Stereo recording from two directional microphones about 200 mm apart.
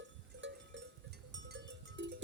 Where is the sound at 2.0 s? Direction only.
60° right (ahead or behind).